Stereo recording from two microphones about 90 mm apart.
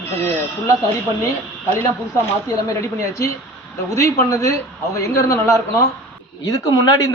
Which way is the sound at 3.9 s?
40° left (ahead or behind).